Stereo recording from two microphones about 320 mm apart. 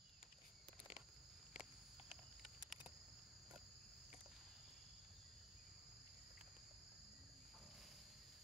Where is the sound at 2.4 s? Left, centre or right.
Centre.